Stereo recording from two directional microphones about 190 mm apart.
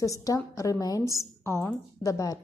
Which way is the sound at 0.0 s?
15° left (ahead or behind).